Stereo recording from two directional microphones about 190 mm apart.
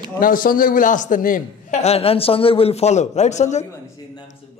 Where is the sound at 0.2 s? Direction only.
50° left (ahead or behind).